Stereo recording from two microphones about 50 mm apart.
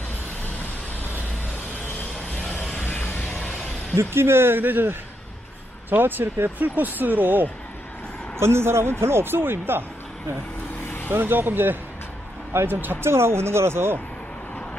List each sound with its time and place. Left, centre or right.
2.5 s a sound: left
3.9 s speech: right
8.4 s speech: right
11.1 s speech: right